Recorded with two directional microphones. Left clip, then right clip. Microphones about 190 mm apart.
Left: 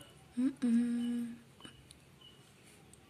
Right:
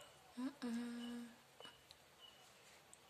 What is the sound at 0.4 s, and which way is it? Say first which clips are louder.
Humming: left 14 dB; 10° right (ahead or behind).